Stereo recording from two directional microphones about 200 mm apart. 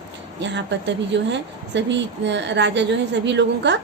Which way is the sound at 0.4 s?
60° right (ahead or behind).